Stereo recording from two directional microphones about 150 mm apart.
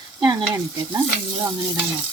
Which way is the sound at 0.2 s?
25° right (ahead or behind).